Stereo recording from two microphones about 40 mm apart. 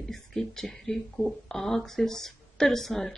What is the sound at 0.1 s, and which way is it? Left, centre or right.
Speech, centre.